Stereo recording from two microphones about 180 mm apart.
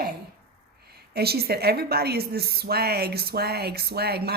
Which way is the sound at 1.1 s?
60° right (ahead or behind).